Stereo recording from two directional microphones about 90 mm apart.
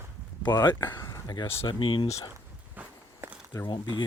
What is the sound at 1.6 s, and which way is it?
Speech, 65° left (ahead or behind).